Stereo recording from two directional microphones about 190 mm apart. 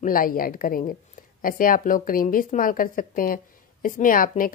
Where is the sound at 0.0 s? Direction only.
50° left (ahead or behind).